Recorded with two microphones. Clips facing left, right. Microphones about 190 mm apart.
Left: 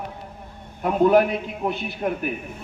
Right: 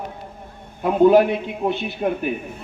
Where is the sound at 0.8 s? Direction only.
25° right (ahead or behind).